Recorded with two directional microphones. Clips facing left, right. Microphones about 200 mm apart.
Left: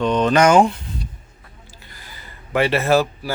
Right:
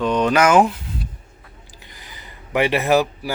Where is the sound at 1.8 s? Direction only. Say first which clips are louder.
Even; 20° right (ahead or behind).